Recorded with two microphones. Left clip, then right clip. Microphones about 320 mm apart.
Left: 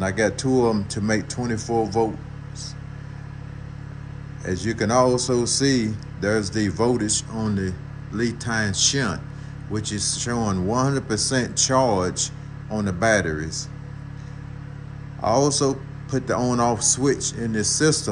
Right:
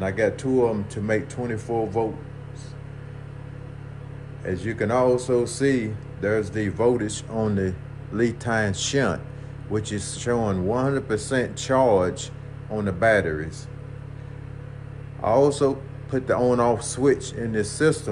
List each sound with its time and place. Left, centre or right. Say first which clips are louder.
0.0 s speech: left 1 dB; centre
4.5 s speech: left 1 dB; centre
15.2 s speech: right 1 dB; centre